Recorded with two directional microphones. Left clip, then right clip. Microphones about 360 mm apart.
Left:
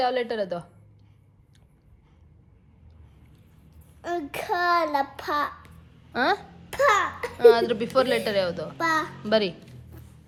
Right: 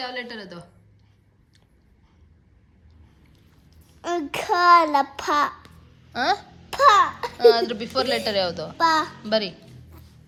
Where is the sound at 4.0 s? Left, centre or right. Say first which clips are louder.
Right 4 dB; right.